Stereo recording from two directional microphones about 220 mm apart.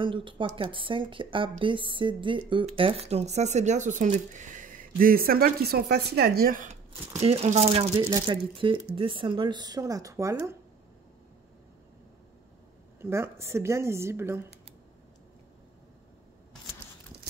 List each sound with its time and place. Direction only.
0.0 s speech: 20° right (ahead or behind)
13.0 s speech: 10° right (ahead or behind)